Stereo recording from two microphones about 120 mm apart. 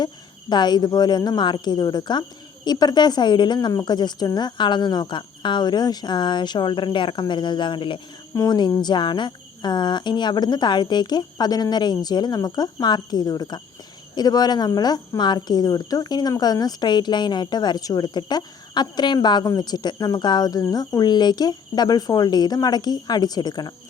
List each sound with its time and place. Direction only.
0.5 s speech: 35° left (ahead or behind)